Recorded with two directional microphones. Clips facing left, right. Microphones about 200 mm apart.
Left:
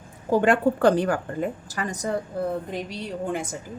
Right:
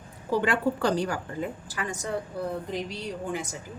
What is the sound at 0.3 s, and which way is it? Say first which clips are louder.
A woman's voice: left 6 dB; 50° left (ahead or behind).